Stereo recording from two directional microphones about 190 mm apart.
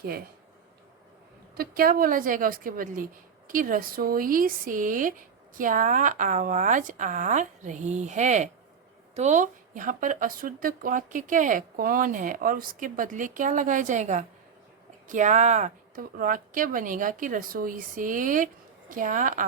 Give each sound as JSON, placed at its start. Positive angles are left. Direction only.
{"t": 1.5, "sound": "a woman's voice", "side_deg": -50}